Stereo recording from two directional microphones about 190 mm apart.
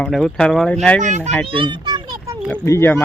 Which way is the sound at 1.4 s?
25° right (ahead or behind).